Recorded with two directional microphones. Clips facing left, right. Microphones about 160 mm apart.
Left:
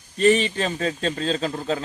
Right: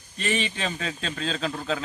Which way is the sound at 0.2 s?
40° left (ahead or behind).